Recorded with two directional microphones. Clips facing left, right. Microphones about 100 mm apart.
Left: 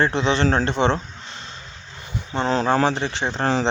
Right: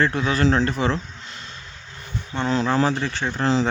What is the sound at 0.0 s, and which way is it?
Speech, 25° left (ahead or behind).